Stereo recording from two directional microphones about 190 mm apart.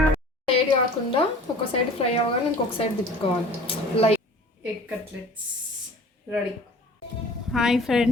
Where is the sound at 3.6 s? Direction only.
30° left (ahead or behind).